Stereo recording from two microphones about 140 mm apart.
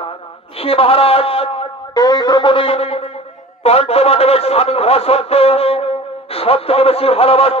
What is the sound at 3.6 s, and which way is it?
A man's voice, 45° left (ahead or behind).